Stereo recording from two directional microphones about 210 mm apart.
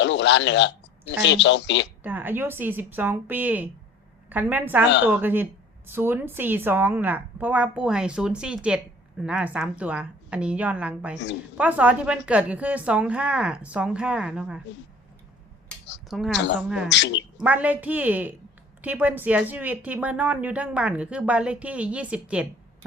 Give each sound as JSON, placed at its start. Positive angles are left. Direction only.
{"t": 0.0, "sound": "a man's voice", "side_deg": 60}
{"t": 2.0, "sound": "a woman's voice", "side_deg": -10}
{"t": 16.0, "sound": "a woman's voice", "side_deg": 0}
{"t": 16.9, "sound": "speech", "side_deg": 60}
{"t": 17.3, "sound": "a woman's voice", "side_deg": -5}